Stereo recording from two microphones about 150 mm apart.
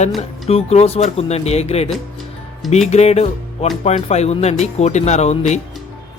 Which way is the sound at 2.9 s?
45° left (ahead or behind).